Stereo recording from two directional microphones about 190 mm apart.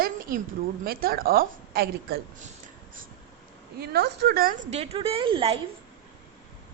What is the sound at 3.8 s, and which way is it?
Speech, 60° right (ahead or behind).